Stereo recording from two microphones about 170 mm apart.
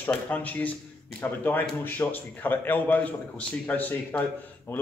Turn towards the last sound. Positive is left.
turn(degrees=15)  # may be behind; listen again after turning